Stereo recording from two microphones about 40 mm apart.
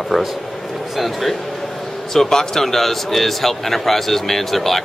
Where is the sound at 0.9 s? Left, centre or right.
Centre.